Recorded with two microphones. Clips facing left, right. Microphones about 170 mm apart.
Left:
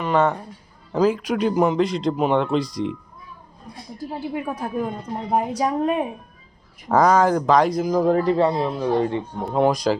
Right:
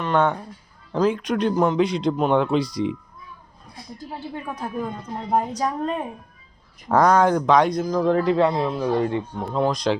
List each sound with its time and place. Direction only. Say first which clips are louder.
0.0 s speech: left 1 dB; 5° left (ahead or behind)
3.9 s speech: left 5 dB; 10° left (ahead or behind)
8.2 s a man's voice: even; 40° left (ahead or behind)
8.5 s speech: even; 5° left (ahead or behind)
9.0 s speech: left 1 dB; 20° left (ahead or behind)